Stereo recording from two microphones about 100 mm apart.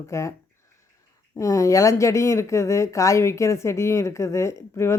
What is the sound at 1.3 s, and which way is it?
Speech, 35° left (ahead or behind).